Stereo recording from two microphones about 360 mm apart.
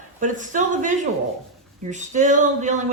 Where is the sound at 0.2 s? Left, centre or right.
Right.